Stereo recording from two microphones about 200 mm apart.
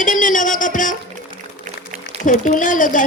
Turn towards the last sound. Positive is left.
turn(degrees=40)  # may be behind; listen again after turning